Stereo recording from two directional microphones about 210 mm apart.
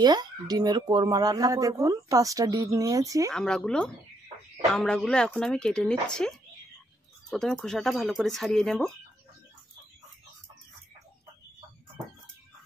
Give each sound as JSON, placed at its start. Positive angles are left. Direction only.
{"t": 0.0, "sound": "speech", "side_deg": -20}
{"t": 3.3, "sound": "speech", "side_deg": 5}